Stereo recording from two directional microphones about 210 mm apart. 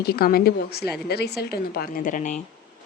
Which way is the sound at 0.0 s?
50° left (ahead or behind).